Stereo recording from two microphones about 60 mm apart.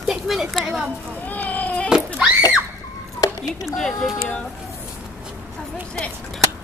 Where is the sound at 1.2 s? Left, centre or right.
Left.